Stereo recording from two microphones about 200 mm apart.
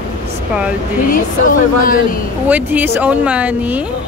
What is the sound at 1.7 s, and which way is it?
Speech, 45° left (ahead or behind).